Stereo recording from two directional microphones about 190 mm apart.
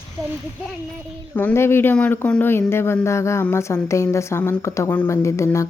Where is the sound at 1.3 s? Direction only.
10° left (ahead or behind).